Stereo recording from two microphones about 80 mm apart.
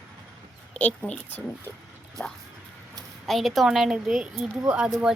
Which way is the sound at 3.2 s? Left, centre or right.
Centre.